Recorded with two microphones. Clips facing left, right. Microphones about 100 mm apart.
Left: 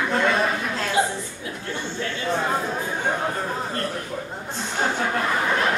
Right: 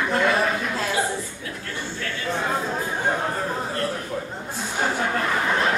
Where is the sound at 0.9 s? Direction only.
25° left (ahead or behind).